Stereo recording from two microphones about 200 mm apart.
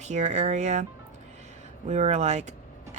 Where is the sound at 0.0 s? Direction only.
35° right (ahead or behind).